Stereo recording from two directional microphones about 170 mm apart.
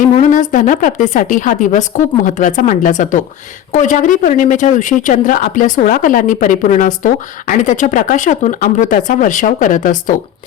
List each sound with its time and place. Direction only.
0.2 s speech: 50° left (ahead or behind)